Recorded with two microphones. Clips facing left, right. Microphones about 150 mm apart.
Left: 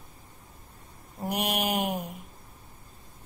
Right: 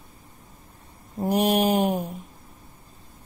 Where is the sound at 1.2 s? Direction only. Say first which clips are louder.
Right 8 dB; 30° right (ahead or behind).